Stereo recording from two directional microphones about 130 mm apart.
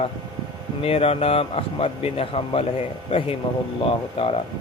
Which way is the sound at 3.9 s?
45° left (ahead or behind).